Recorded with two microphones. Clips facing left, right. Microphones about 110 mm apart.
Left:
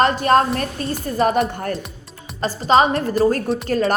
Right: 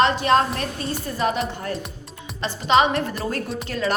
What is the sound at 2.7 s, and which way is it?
A woman's voice, 35° left (ahead or behind).